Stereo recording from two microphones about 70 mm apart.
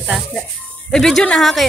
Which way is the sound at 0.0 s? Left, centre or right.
Centre.